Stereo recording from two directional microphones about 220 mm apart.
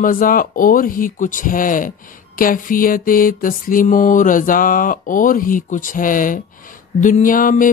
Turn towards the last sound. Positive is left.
turn(degrees=40)  # may be behind; listen again after turning